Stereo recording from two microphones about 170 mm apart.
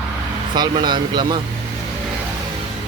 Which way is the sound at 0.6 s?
25° right (ahead or behind).